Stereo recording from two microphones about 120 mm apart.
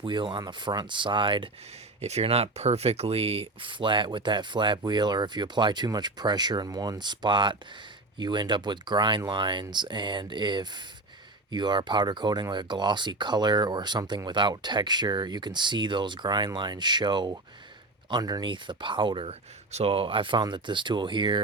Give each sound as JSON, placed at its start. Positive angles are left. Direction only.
{"t": 0.0, "sound": "speech", "side_deg": -45}
{"t": 2.0, "sound": "speech", "side_deg": -60}